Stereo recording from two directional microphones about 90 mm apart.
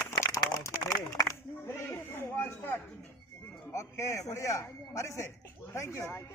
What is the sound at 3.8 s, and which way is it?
Speech, 35° left (ahead or behind).